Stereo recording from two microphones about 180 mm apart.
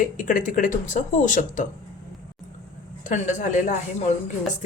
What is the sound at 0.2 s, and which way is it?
Speech, 50° left (ahead or behind).